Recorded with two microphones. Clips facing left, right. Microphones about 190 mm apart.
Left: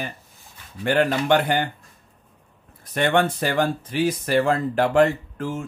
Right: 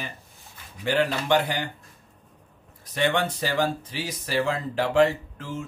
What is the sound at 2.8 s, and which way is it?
Speech, 55° left (ahead or behind).